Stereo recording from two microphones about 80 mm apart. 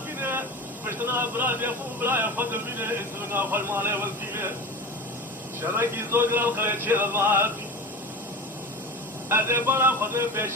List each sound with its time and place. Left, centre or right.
0.2 s vehicle: right
0.9 s a man's voice: right
5.7 s a man's voice: right
9.3 s music: right